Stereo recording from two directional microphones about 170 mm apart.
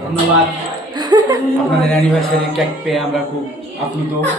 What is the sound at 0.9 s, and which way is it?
Laughter, 25° right (ahead or behind).